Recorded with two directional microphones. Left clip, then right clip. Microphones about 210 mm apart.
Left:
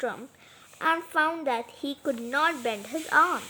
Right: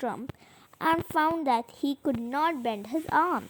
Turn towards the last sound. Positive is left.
turn(degrees=-35)  # may be behind; listen again after turning